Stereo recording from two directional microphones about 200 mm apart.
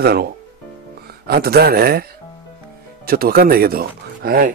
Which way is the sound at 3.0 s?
50° right (ahead or behind).